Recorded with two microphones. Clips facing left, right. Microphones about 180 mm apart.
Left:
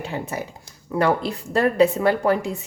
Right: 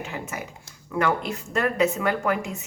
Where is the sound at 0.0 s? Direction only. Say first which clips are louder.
Left 5 dB; 35° left (ahead or behind).